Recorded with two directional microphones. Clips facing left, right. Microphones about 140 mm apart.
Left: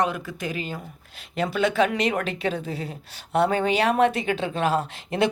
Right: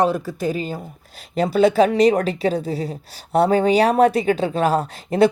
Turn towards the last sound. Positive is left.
turn(degrees=-40)  # may be behind; listen again after turning